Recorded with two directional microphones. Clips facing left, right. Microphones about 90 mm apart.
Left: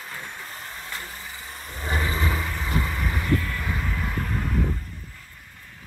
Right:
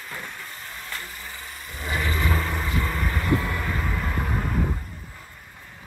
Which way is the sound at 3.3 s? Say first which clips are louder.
Right 1 dB; 20° right (ahead or behind).